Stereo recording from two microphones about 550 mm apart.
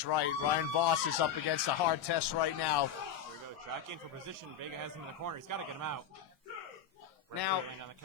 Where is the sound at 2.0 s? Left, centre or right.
Left.